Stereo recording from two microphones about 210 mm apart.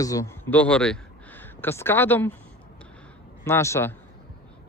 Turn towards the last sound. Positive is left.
turn(degrees=10)  # may be behind; listen again after turning